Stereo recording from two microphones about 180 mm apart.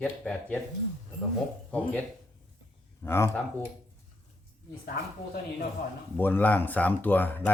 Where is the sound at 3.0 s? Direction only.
15° left (ahead or behind).